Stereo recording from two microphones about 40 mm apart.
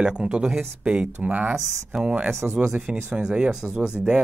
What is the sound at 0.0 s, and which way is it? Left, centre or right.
Speech, right.